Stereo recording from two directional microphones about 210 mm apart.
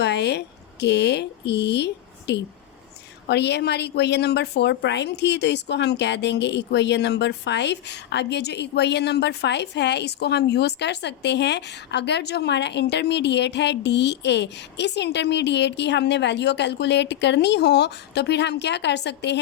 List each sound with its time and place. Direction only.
0.0 s a woman's voice: 55° left (ahead or behind)